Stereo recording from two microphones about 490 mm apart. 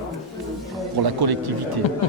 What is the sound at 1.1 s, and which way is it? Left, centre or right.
Speech, right.